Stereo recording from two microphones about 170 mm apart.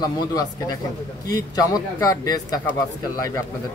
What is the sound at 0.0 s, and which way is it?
Speech, 25° left (ahead or behind).